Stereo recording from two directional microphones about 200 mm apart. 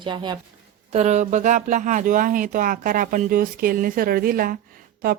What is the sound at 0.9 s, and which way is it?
Speech, 35° right (ahead or behind).